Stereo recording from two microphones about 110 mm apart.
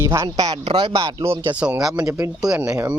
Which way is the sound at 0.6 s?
50° right (ahead or behind).